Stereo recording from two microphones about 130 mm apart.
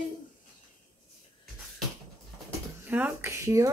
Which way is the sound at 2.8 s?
15° right (ahead or behind).